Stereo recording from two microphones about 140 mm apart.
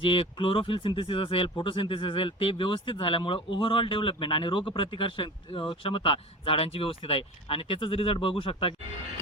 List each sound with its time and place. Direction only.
0.0 s speech: 40° left (ahead or behind)